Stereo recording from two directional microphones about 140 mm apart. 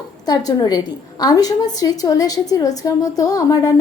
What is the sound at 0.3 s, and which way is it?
A woman's voice, 30° left (ahead or behind).